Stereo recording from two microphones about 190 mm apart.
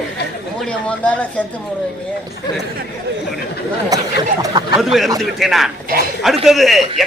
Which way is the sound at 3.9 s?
20° right (ahead or behind).